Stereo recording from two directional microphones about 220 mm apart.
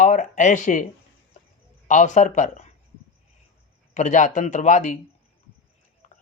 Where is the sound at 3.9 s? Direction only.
35° left (ahead or behind).